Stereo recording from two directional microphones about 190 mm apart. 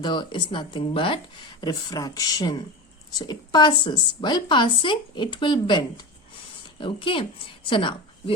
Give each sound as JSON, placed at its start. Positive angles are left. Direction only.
{"t": 0.0, "sound": "a woman's voice", "side_deg": 25}